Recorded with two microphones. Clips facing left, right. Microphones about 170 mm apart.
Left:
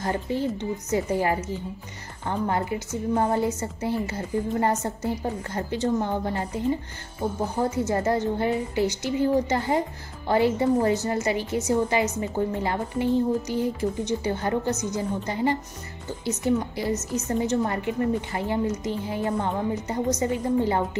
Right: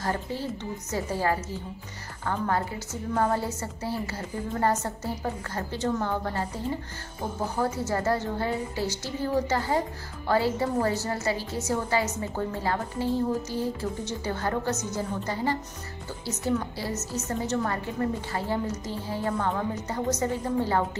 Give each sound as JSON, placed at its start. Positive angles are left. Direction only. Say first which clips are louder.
{"t": 0.0, "sound": "a woman's voice", "louder": "left 4 dB", "side_deg": 20}
{"t": 7.8, "sound": "a woman's voice", "louder": "left 3 dB", "side_deg": 20}